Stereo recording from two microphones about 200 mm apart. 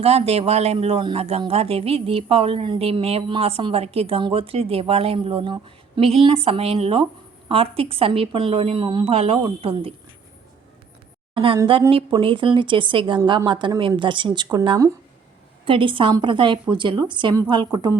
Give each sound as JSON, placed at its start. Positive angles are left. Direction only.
{"t": 0.0, "sound": "a man's voice", "side_deg": -30}
{"t": 12.1, "sound": "a man's voice", "side_deg": -25}